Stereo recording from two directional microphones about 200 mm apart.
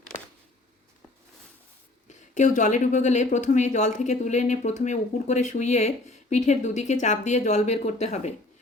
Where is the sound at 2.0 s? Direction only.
35° left (ahead or behind).